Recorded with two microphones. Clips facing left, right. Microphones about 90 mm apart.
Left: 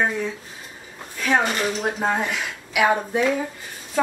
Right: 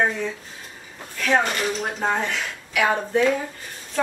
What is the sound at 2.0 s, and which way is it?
Speech, 10° left (ahead or behind).